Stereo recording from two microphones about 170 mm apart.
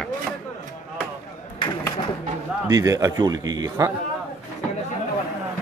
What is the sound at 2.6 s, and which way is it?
A man's voice, 20° right (ahead or behind).